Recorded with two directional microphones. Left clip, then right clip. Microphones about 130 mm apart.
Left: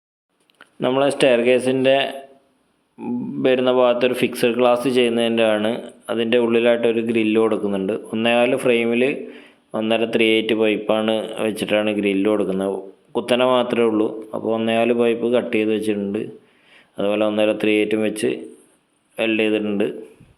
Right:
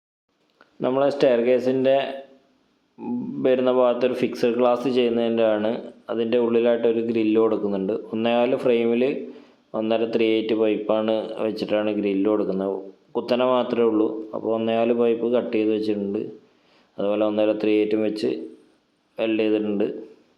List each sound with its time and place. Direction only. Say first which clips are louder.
0.6 s speech: left 3 dB; 30° left (ahead or behind)